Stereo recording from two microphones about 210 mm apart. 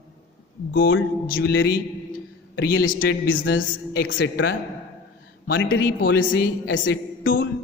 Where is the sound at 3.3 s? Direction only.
65° left (ahead or behind).